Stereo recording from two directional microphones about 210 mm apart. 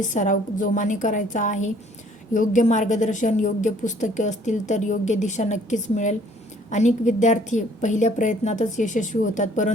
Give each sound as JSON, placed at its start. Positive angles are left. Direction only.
{"t": 0.0, "sound": "a woman's voice", "side_deg": 35}